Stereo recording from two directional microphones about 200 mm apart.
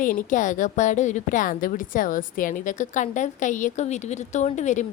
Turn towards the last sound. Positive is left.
turn(degrees=35)  # may be behind; listen again after turning